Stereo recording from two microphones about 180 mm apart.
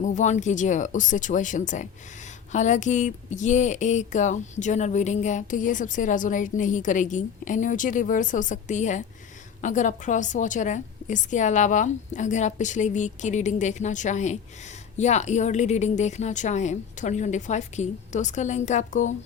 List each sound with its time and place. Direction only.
0.0 s a woman's voice: 45° left (ahead or behind)